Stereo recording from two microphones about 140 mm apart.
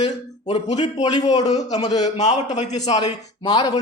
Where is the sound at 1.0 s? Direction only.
30° left (ahead or behind).